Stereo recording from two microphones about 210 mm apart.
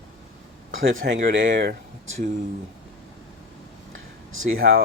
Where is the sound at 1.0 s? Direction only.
45° right (ahead or behind).